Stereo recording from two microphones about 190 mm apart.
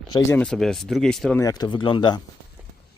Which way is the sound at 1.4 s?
20° left (ahead or behind).